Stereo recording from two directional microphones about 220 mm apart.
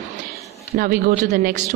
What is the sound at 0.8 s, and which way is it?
Speech, 40° right (ahead or behind).